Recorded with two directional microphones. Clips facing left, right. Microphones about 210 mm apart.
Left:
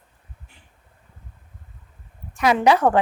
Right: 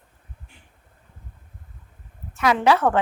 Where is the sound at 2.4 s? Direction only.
20° left (ahead or behind).